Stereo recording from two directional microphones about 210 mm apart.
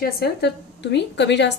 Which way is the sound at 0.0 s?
50° left (ahead or behind).